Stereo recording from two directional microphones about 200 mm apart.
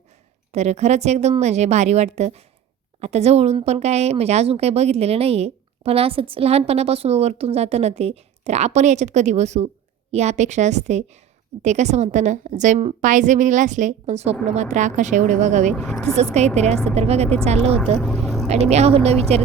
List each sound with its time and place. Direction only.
0.5 s speech: 35° right (ahead or behind)
15.7 s speech: centre (ahead or behind)
16.1 s speech: 35° right (ahead or behind)
18.0 s vehicle: centre (ahead or behind)
18.4 s speech: 35° right (ahead or behind)